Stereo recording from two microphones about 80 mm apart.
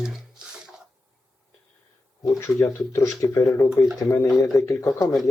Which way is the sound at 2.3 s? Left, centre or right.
Left.